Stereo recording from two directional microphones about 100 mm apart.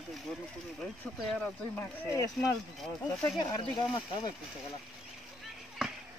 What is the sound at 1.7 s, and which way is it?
Speech, 20° left (ahead or behind).